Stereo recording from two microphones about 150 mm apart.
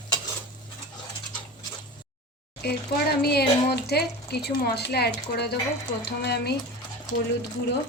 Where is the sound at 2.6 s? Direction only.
90° left.